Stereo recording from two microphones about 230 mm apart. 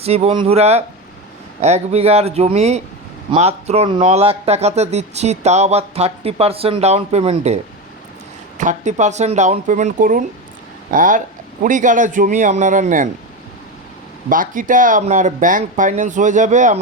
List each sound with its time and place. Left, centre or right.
0.0 s speech: right
14.3 s speech: right